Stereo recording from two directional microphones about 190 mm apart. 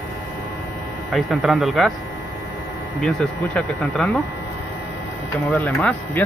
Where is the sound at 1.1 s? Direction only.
Centre (ahead or behind).